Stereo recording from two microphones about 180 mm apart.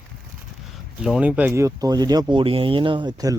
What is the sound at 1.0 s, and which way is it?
Speech, 5° right (ahead or behind).